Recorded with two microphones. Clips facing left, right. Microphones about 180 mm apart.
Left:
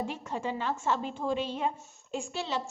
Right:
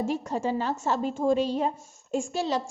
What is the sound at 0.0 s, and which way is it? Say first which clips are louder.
A woman's voice: right 6 dB; 40° right (ahead or behind).